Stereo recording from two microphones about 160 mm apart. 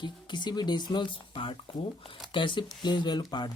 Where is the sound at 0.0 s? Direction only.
30° left (ahead or behind).